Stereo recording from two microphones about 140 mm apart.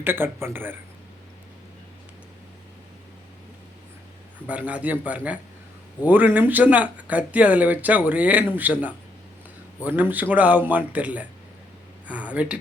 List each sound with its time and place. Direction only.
0.0 s speech: 15° right (ahead or behind)
4.4 s speech: 10° right (ahead or behind)